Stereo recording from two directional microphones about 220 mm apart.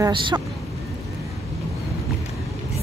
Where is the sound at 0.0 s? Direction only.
20° right (ahead or behind).